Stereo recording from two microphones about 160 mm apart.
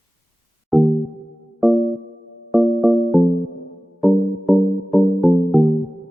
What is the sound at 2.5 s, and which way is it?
Music, centre (ahead or behind).